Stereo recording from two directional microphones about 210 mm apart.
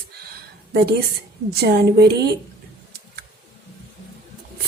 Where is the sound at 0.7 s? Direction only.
50° right (ahead or behind).